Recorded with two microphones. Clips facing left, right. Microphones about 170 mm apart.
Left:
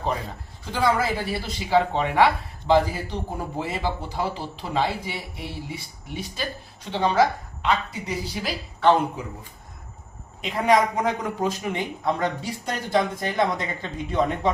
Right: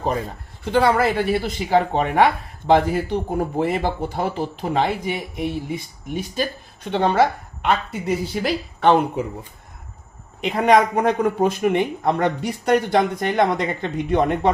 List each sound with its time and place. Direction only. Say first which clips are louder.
0.6 s a man's voice: right 6 dB; 65° right (ahead or behind)
10.4 s a man's voice: right 4 dB; 60° right (ahead or behind)